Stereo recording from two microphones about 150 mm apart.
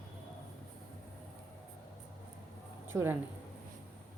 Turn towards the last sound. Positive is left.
turn(degrees=-15)  # may be behind; listen again after turning